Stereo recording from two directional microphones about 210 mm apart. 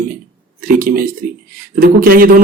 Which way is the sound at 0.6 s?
40° right (ahead or behind).